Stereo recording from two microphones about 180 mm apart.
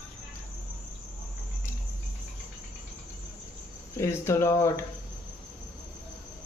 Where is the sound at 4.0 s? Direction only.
15° left (ahead or behind).